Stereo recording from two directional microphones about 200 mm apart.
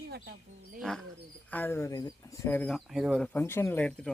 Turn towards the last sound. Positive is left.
turn(degrees=5)  # may be behind; listen again after turning